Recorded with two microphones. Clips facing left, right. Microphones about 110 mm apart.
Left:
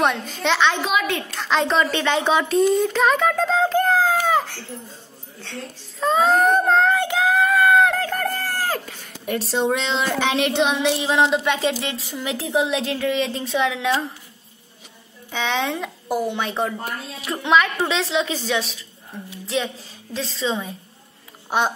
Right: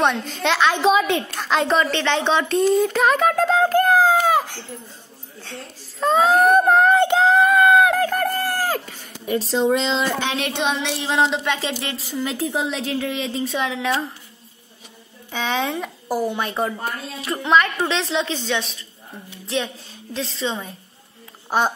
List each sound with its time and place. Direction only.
0.0 s a woman's voice: 5° left (ahead or behind)
1.0 s a woman's voice: 20° right (ahead or behind)
1.4 s a woman's voice: 5° right (ahead or behind)
1.9 s speech: 10° left (ahead or behind); by 4.6 s 15° right (ahead or behind)
5.9 s screaming: centre (ahead or behind)
8.4 s a sound: 10° right (ahead or behind)
10.7 s a woman's voice: 10° left (ahead or behind)
15.3 s a woman's voice: 5° right (ahead or behind)